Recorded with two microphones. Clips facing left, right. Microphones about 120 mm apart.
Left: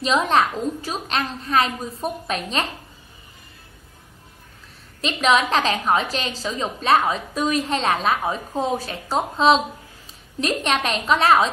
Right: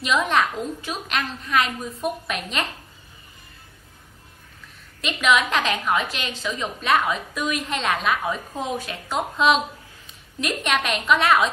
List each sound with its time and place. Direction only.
0.0 s a woman's voice: 35° left (ahead or behind)
5.0 s a woman's voice: 35° left (ahead or behind)